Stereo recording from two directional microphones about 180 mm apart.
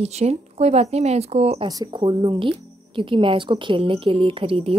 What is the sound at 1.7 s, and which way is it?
Speech, 25° right (ahead or behind).